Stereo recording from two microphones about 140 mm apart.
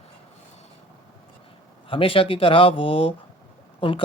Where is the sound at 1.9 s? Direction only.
40° left (ahead or behind).